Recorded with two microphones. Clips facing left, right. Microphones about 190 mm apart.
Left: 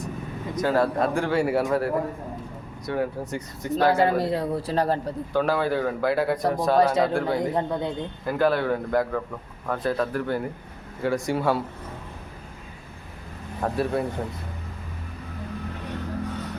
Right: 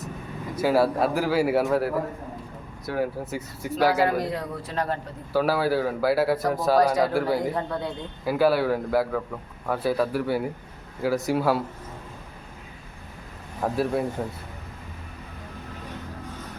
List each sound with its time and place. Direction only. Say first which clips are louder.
0.5 s a man's voice: right 1 dB; 10° right (ahead or behind)
4.2 s a man's voice: left 4 dB; 30° left (ahead or behind)
5.3 s a man's voice: right 1 dB; 5° right (ahead or behind)
6.7 s a man's voice: even; 25° left (ahead or behind)
7.1 s a man's voice: even; 5° right (ahead or behind)
7.5 s a man's voice: left 3 dB; 20° left (ahead or behind)
8.2 s a man's voice: right 2 dB; 5° right (ahead or behind)
13.6 s a man's voice: even; centre (ahead or behind)